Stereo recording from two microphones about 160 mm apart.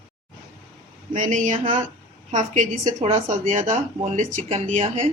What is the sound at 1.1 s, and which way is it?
Speech, 50° right (ahead or behind).